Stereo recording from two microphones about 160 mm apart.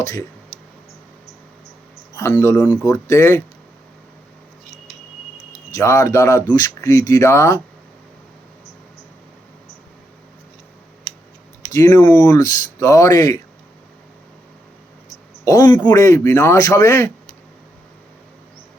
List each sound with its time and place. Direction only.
0.0 s speech: 20° left (ahead or behind)
2.1 s speech: 20° left (ahead or behind)
5.7 s speech: 20° left (ahead or behind)
11.7 s speech: 20° left (ahead or behind)
15.4 s speech: 25° left (ahead or behind)